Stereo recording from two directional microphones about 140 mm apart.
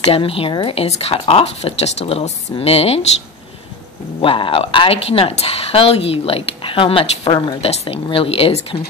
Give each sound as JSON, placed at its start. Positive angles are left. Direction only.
{"t": 0.1, "sound": "speech", "side_deg": 40}
{"t": 4.2, "sound": "a woman's voice", "side_deg": 40}